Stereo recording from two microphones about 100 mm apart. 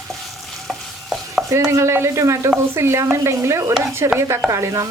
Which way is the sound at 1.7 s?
30° right (ahead or behind).